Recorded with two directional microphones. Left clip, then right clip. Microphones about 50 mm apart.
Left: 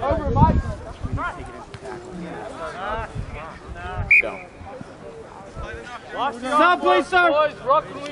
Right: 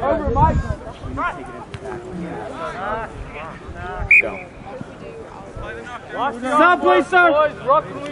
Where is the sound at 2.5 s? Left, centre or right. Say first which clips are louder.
Right 4 dB; centre.